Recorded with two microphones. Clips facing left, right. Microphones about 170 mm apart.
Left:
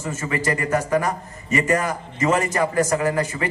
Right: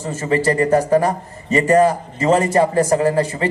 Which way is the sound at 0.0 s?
30° right (ahead or behind).